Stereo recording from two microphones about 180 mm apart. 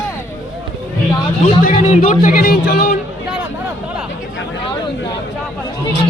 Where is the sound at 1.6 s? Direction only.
45° left (ahead or behind).